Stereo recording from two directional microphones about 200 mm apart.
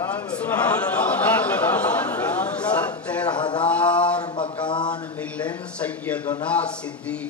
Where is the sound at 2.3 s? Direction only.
5° left (ahead or behind).